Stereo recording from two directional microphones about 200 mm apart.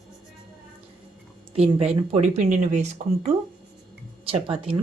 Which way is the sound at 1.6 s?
30° right (ahead or behind).